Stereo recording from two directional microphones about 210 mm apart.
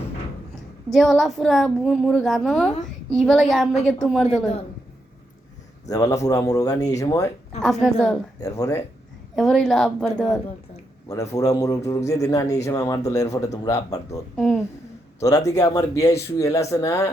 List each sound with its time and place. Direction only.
0.9 s a woman's voice: centre (ahead or behind)
5.9 s a man's voice: 15° left (ahead or behind)
7.6 s a woman's voice: centre (ahead or behind)
8.4 s a man's voice: 15° left (ahead or behind)
9.3 s a woman's voice: centre (ahead or behind)
11.1 s a man's voice: 15° left (ahead or behind)
14.3 s speech: 5° left (ahead or behind)
15.2 s a man's voice: 15° left (ahead or behind)